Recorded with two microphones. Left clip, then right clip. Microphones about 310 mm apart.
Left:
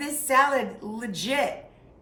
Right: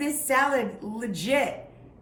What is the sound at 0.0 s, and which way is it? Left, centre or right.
A woman's voice, centre.